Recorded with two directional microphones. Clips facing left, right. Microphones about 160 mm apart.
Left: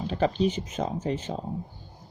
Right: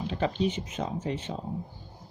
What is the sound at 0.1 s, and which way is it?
Speech, 40° left (ahead or behind).